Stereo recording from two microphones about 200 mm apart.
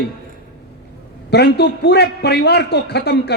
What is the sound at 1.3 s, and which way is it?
A man's voice, 55° left (ahead or behind).